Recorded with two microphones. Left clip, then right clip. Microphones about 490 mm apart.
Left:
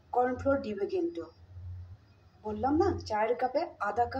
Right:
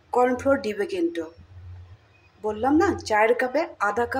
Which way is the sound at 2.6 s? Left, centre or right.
Left.